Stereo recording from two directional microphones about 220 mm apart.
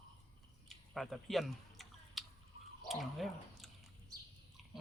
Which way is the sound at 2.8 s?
Centre (ahead or behind).